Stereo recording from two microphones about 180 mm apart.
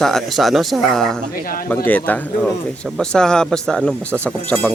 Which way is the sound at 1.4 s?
50° left (ahead or behind).